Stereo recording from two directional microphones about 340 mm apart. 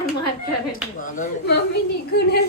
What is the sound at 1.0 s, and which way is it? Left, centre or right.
Speech, left.